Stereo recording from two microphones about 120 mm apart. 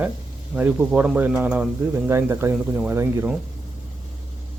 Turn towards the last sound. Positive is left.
turn(degrees=-20)  # may be behind; listen again after turning